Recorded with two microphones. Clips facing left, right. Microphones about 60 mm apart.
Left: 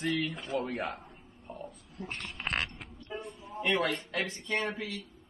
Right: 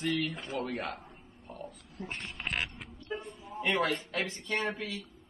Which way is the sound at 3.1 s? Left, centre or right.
Centre.